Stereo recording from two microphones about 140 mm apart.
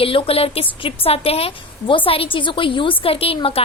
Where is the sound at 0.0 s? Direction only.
40° left (ahead or behind).